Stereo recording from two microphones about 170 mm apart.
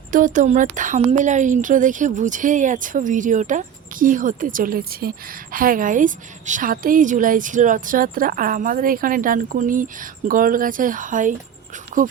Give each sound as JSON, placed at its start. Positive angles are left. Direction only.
{"t": 0.1, "sound": "a woman's voice", "side_deg": -50}